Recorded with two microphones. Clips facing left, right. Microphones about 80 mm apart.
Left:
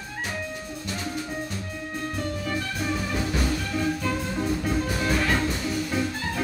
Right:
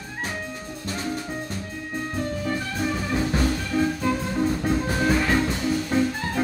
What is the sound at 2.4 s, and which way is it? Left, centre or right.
Music, right.